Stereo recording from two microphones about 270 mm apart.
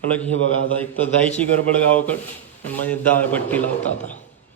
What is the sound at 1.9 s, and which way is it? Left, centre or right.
A man's voice, centre.